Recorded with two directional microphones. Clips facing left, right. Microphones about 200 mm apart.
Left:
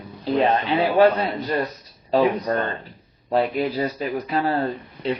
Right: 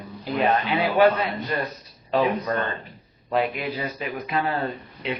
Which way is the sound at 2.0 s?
35° left (ahead or behind).